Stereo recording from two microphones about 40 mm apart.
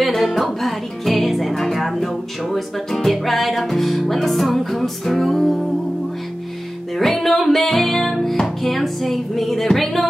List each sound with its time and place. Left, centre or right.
0.0 s music: centre
7.0 s music: centre